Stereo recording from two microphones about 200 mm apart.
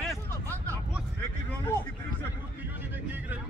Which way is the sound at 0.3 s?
10° left (ahead or behind).